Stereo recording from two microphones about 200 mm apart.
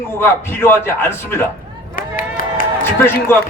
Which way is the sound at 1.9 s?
45° left (ahead or behind).